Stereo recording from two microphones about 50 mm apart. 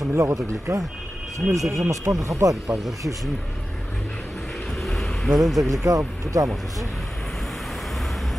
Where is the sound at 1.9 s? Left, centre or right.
Right.